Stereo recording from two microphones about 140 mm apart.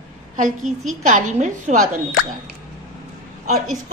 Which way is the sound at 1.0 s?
60° right (ahead or behind).